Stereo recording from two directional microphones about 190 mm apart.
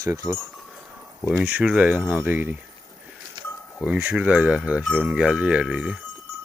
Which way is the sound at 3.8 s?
10° right (ahead or behind).